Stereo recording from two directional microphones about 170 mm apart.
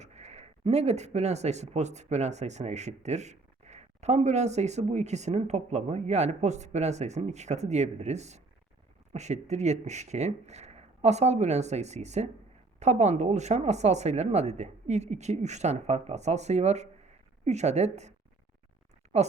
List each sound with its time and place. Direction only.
0.0 s speech: 40° right (ahead or behind)
19.1 s speech: 40° right (ahead or behind)